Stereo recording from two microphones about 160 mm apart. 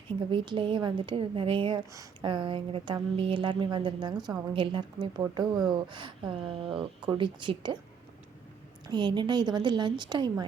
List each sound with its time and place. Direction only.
0.3 s a woman's voice: 30° right (ahead or behind)
8.9 s a woman's voice: 30° right (ahead or behind)